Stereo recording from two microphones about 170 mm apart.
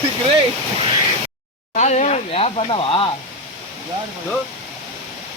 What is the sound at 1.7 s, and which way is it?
Speech, 45° left (ahead or behind).